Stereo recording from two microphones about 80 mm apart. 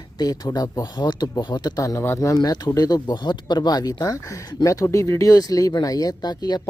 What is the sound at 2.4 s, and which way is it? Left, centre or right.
Speech, left.